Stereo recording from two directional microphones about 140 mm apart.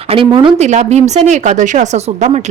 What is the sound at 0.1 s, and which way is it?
A woman's voice, 40° right (ahead or behind).